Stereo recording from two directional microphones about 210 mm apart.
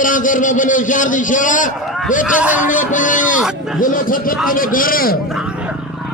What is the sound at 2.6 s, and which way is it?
A man's voice, 40° left (ahead or behind).